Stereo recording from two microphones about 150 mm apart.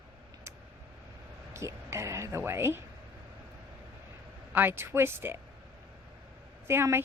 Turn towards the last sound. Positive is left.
turn(degrees=-15)  # may be behind; listen again after turning